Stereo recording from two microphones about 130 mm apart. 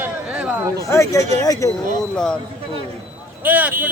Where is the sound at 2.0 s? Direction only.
5° left (ahead or behind).